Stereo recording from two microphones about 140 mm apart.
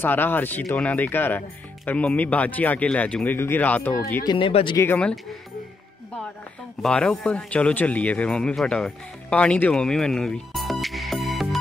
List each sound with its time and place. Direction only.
0.0 s speech: 15° left (ahead or behind)
4.0 s speech: 25° left (ahead or behind)
4.5 s speech: 45° left (ahead or behind)
4.7 s speech: 15° left (ahead or behind)
6.8 s speech: 5° left (ahead or behind)